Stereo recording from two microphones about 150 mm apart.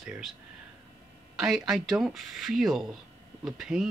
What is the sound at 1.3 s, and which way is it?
Speech, 5° right (ahead or behind).